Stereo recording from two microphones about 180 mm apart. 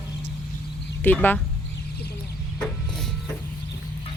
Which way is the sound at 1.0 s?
10° left (ahead or behind).